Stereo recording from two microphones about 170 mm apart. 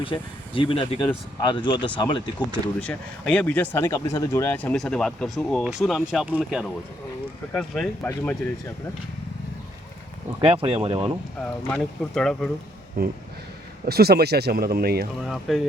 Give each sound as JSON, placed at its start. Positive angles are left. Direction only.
{"t": 0.0, "sound": "speech", "side_deg": 30}
{"t": 2.8, "sound": "speech", "side_deg": 5}
{"t": 10.4, "sound": "speech", "side_deg": -30}
{"t": 11.7, "sound": "speech", "side_deg": 5}
{"t": 13.0, "sound": "speech", "side_deg": -65}
{"t": 15.2, "sound": "speech", "side_deg": 0}